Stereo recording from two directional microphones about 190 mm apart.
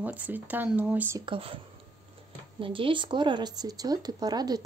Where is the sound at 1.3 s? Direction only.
30° right (ahead or behind).